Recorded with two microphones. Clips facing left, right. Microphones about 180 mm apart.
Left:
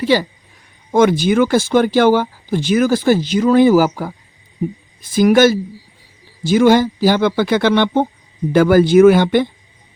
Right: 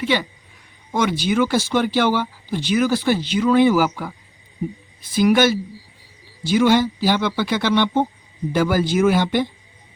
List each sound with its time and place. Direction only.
0.0 s speech: 35° left (ahead or behind)
0.9 s speech: 50° left (ahead or behind)